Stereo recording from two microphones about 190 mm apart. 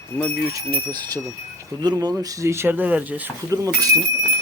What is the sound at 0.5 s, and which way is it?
Speech, 20° right (ahead or behind).